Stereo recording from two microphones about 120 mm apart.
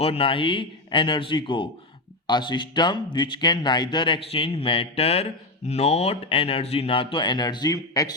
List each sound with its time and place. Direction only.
0.0 s speech: 50° left (ahead or behind); by 8.1 s 35° left (ahead or behind)